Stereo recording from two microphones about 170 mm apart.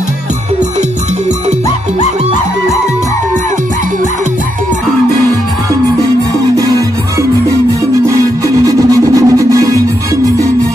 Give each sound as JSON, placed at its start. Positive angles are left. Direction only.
{"t": 8.6, "sound": "music", "side_deg": -20}